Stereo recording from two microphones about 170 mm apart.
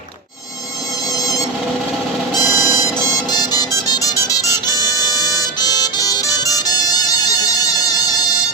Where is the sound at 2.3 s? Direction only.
20° left (ahead or behind).